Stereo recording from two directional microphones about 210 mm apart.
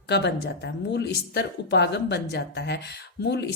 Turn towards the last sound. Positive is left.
turn(degrees=55)  # may be behind; listen again after turning